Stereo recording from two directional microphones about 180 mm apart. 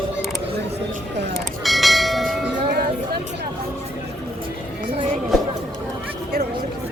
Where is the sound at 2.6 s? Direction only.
60° right (ahead or behind).